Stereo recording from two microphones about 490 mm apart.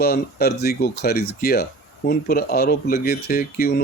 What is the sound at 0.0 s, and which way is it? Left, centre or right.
Speech, centre.